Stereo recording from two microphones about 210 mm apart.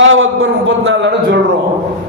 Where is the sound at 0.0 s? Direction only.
65° right (ahead or behind).